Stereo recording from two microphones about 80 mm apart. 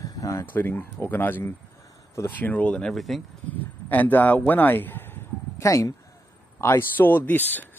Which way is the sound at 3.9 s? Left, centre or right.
Left.